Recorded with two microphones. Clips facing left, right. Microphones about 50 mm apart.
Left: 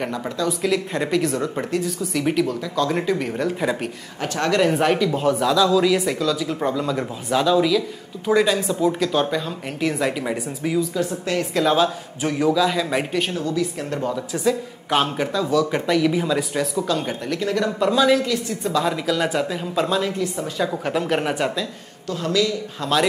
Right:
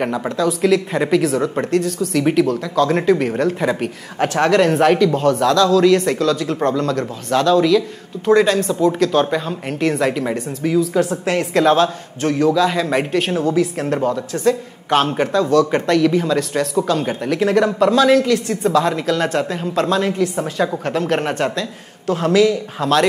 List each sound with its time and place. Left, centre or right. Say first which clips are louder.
0.0 s speech: right 6 dB; centre
0.4 s speech: right 6 dB; centre
6.8 s speech: right 4 dB; centre
10.9 s speech: right 6 dB; right
11.5 s speech: right 5 dB; centre
12.4 s speech: right 2 dB; centre
14.4 s speech: right 4 dB; centre
16.8 s speech: right 4 dB; centre
22.0 s speech: right 7 dB; right
22.8 s speech: right 4 dB; centre